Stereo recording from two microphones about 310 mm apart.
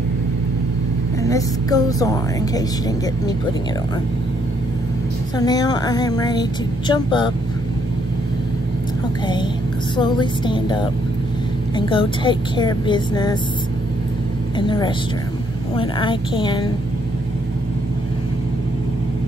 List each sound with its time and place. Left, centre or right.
1.2 s a woman's voice: centre
5.4 s a woman's voice: centre
9.9 s a woman's voice: centre
15.7 s a woman's voice: centre